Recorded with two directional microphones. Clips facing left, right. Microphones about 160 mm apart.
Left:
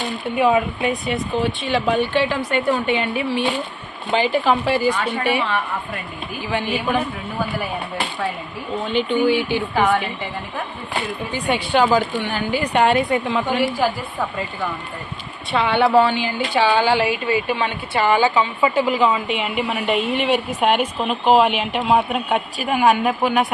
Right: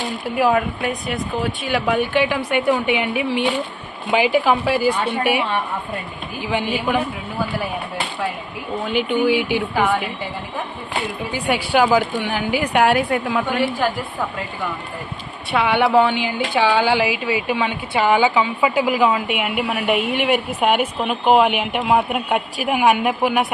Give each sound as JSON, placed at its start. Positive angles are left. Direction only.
{"t": 0.3, "sound": "a woman's voice", "side_deg": 0}
{"t": 8.9, "sound": "a woman's voice", "side_deg": -10}
{"t": 11.3, "sound": "a woman's voice", "side_deg": -10}
{"t": 15.5, "sound": "a woman's voice", "side_deg": -15}